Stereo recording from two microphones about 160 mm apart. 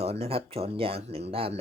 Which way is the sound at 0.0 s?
40° right (ahead or behind).